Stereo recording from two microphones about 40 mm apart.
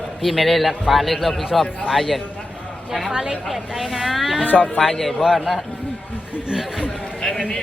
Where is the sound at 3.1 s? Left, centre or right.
Centre.